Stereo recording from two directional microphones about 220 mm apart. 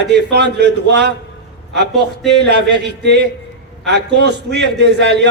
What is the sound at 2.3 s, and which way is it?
Speech, 50° right (ahead or behind).